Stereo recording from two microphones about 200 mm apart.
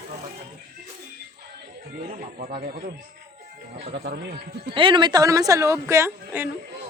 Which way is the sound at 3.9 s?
50° right (ahead or behind).